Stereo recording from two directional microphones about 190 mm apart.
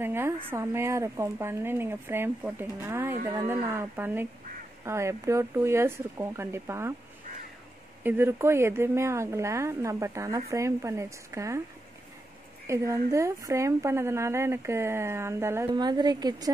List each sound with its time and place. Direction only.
0.0 s speech: 10° right (ahead or behind)
8.0 s speech: 10° right (ahead or behind)
12.6 s speech: 15° right (ahead or behind)